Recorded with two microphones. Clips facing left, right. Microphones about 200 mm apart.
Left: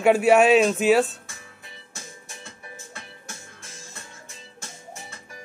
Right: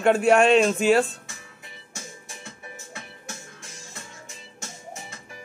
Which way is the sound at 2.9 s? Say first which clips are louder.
Right 2 dB; 15° right (ahead or behind).